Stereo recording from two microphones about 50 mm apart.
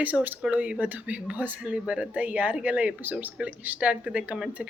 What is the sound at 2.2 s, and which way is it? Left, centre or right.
Speech, right.